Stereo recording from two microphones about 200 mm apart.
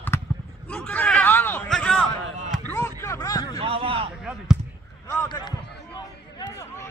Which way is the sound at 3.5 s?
30° right (ahead or behind).